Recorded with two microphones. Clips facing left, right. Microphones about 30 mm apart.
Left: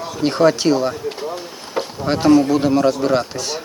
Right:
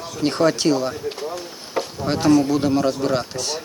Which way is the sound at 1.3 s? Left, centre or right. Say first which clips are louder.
Left 2 dB; centre.